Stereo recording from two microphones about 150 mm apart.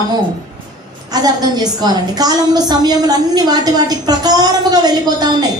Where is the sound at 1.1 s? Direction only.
25° right (ahead or behind).